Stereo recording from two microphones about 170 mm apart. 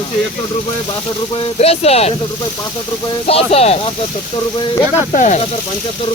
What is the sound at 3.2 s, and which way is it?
Speech, 35° left (ahead or behind).